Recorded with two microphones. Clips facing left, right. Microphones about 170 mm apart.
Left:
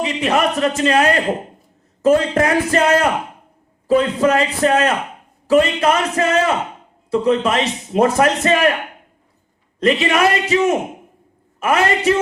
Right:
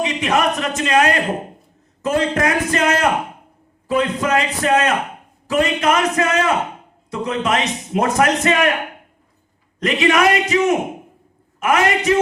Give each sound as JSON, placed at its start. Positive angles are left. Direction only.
{"t": 0.0, "sound": "a man's voice", "side_deg": 30}
{"t": 9.8, "sound": "a man's voice", "side_deg": 30}